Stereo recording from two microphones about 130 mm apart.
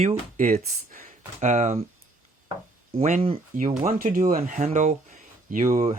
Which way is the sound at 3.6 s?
80° right.